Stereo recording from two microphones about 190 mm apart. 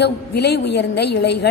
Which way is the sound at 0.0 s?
60° left (ahead or behind).